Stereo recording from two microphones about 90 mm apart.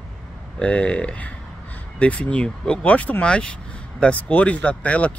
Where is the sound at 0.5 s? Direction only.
15° left (ahead or behind).